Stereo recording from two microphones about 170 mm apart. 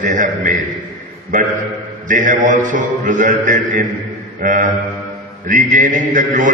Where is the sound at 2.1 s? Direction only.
50° right (ahead or behind).